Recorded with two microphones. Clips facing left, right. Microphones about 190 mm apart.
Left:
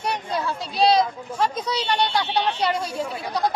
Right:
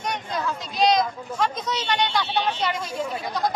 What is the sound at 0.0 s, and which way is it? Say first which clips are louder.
Speech: left 2 dB; 30° left (ahead or behind).